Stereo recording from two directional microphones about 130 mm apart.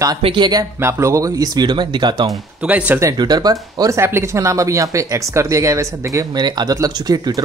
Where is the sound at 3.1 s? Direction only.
30° right (ahead or behind).